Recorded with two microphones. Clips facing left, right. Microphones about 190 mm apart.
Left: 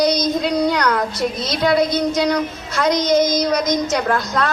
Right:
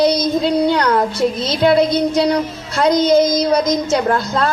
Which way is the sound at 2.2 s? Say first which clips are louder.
Right 3 dB; 30° right (ahead or behind).